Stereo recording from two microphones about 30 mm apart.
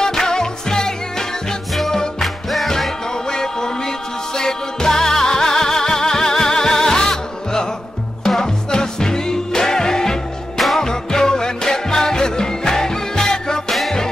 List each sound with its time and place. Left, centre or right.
0.0 s music: left
2.2 s music: centre
3.3 s music: left
13.7 s music: centre